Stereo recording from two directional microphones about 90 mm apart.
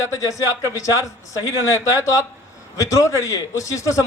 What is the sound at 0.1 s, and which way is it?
A man's voice, 40° left (ahead or behind).